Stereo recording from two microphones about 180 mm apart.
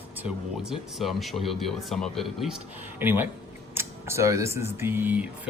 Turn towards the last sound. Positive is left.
turn(degrees=-10)  # may be behind; listen again after turning